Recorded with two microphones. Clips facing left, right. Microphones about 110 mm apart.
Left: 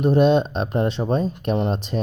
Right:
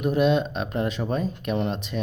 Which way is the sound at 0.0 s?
35° left (ahead or behind).